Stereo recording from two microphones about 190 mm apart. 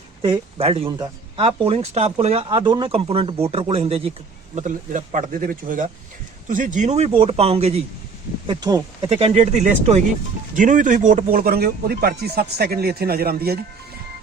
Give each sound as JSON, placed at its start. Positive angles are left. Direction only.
{"t": 0.2, "sound": "speech", "side_deg": -30}
{"t": 4.5, "sound": "speech", "side_deg": -40}
{"t": 9.1, "sound": "speech", "side_deg": -35}